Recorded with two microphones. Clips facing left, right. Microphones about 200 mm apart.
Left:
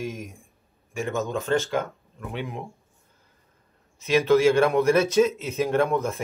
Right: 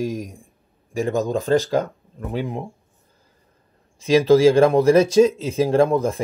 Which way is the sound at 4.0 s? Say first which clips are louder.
Right 5 dB; 30° right (ahead or behind).